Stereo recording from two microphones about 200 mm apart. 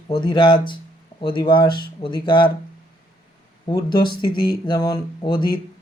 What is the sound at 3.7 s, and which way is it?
Speech, 20° left (ahead or behind).